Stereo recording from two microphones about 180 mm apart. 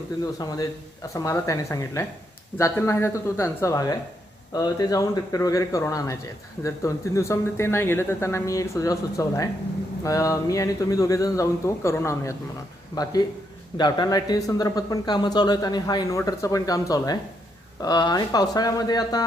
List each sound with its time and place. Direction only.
0.3 s speech: 20° left (ahead or behind)